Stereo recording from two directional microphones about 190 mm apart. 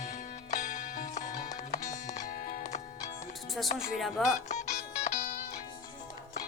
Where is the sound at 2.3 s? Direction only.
45° left (ahead or behind).